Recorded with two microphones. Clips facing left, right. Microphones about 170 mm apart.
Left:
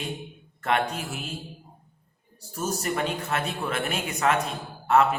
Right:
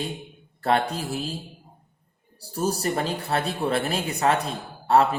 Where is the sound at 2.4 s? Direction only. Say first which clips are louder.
Right 4 dB; 35° right (ahead or behind).